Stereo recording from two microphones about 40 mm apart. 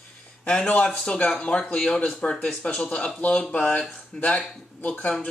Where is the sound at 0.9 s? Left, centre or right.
Left.